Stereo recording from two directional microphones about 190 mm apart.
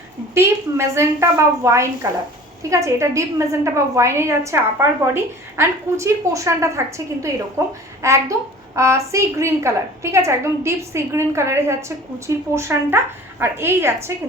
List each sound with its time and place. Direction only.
0.3 s a woman's voice: 15° right (ahead or behind)